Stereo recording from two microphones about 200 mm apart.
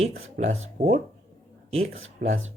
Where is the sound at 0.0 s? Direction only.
35° right (ahead or behind).